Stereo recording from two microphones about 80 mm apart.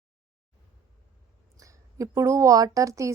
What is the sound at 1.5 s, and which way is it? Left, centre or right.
A woman's voice, right.